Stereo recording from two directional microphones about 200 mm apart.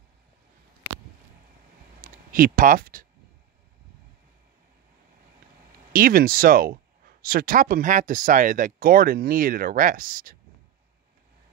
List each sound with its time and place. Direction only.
2.3 s speech: 45° right (ahead or behind)
5.9 s speech: 45° right (ahead or behind)